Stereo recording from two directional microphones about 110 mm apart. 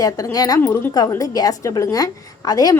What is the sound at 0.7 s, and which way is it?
Speech, 25° left (ahead or behind).